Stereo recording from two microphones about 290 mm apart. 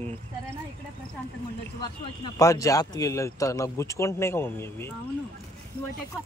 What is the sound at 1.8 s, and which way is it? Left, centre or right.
Speech, centre.